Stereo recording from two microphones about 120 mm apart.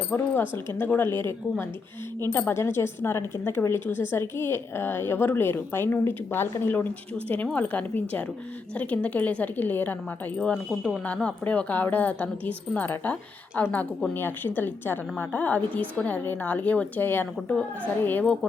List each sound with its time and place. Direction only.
0.1 s speech: 20° left (ahead or behind)
7.5 s a woman's voice: 15° left (ahead or behind)
10.7 s speech: 5° right (ahead or behind)
11.0 s a woman's voice: 10° left (ahead or behind)